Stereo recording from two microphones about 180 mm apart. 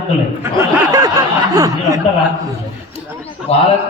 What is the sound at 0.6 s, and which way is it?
Speech, 20° right (ahead or behind).